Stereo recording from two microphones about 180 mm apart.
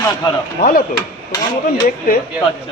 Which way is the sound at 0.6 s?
50° left (ahead or behind).